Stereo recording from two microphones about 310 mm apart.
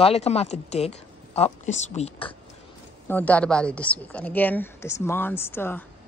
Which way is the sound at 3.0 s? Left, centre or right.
Centre.